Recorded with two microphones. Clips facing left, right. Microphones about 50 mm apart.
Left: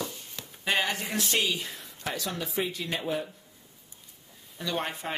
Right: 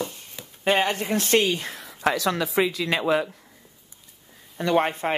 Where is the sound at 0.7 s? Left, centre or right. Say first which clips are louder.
Right 6 dB; right.